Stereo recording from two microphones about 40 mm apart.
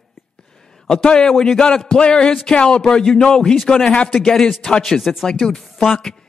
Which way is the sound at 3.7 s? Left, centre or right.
Left.